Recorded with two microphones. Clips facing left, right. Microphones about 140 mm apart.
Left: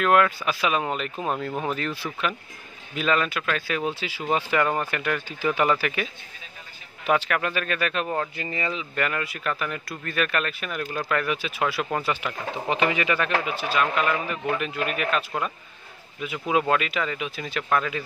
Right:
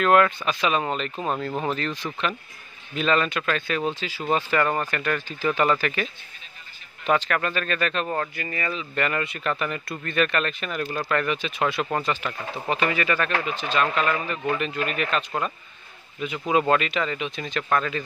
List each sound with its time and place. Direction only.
0.0 s speech: 5° left (ahead or behind)
7.1 s speech: 10° left (ahead or behind)
8.4 s speech: 20° left (ahead or behind)
8.9 s speech: 5° left (ahead or behind)